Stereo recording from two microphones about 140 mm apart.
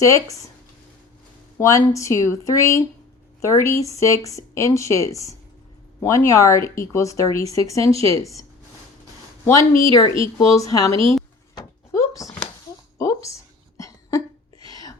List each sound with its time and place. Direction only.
0.0 s speech: 20° left (ahead or behind)
1.5 s speech: 20° left (ahead or behind)
9.5 s speech: 20° left (ahead or behind)
11.5 s a sound: 20° left (ahead or behind)